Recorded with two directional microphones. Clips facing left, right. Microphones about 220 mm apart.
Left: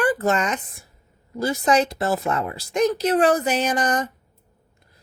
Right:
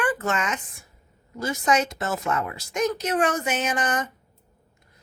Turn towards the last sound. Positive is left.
turn(degrees=35)  # may be behind; listen again after turning